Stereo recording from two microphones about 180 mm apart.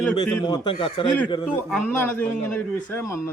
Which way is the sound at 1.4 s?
Centre (ahead or behind).